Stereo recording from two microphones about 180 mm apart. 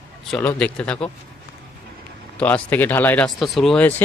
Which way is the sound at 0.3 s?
5° left (ahead or behind).